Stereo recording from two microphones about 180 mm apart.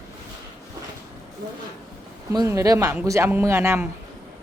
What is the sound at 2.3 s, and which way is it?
A woman's voice, 20° right (ahead or behind).